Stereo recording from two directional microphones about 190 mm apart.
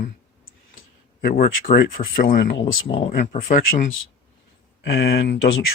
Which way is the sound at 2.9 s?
30° left (ahead or behind).